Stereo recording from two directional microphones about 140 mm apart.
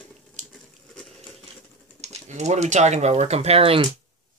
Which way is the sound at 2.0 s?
50° right (ahead or behind).